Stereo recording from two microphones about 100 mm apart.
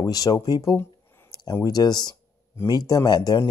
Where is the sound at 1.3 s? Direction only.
40° left (ahead or behind).